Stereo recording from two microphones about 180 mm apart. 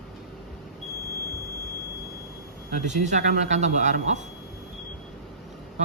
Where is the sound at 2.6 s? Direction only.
40° right (ahead or behind).